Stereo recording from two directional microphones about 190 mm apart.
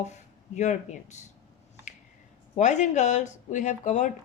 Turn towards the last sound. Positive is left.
turn(degrees=40)  # may be behind; listen again after turning